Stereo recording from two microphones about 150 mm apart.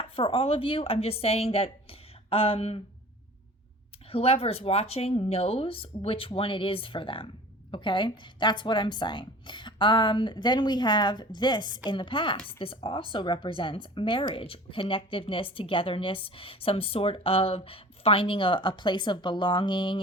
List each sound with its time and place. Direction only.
0.0 s speech: 35° left (ahead or behind)
4.1 s speech: 40° left (ahead or behind)